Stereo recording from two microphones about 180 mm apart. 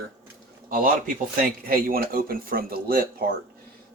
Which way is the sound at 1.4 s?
55° right (ahead or behind).